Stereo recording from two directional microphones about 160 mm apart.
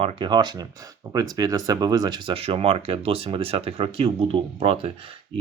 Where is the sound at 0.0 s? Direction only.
35° right (ahead or behind).